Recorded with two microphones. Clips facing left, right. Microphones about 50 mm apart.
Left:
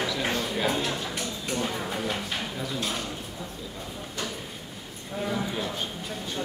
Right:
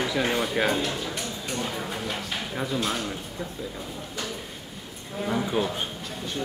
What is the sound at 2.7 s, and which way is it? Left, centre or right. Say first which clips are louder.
Speech: right 5 dB; centre.